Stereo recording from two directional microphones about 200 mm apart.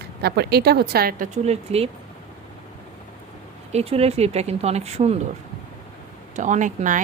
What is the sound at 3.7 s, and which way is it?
Speech, 30° right (ahead or behind).